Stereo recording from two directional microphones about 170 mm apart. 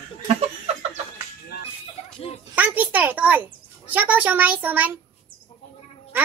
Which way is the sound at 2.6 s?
10° right (ahead or behind).